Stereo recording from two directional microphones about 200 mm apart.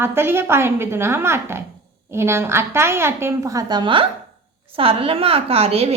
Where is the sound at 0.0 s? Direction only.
10° right (ahead or behind).